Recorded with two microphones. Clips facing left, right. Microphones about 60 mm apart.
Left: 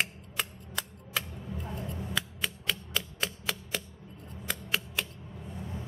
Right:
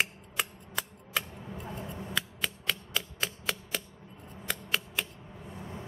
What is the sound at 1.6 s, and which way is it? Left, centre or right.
Scissors, centre.